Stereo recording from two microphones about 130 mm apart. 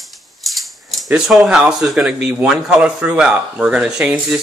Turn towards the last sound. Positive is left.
turn(degrees=-10)  # may be behind; listen again after turning